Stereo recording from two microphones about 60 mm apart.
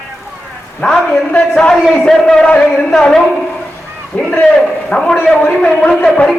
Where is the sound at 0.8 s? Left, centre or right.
Centre.